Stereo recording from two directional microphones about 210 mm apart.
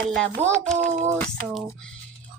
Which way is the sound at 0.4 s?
10° right (ahead or behind).